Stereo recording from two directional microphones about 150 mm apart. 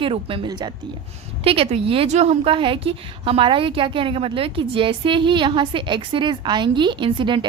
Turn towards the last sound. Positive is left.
turn(degrees=-35)  # may be behind; listen again after turning